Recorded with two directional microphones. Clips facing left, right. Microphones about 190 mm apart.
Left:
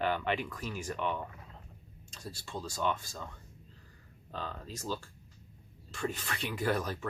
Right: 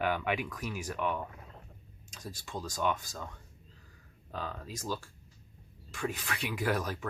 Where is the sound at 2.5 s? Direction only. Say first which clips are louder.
Right 1 dB; 5° right (ahead or behind).